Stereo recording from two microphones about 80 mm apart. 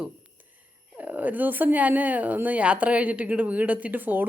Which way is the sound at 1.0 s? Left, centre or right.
Right.